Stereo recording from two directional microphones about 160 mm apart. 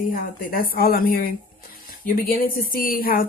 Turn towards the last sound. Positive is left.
turn(degrees=65)  # may be behind; listen again after turning